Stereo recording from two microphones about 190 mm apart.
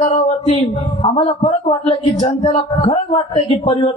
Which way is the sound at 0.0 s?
25° left (ahead or behind).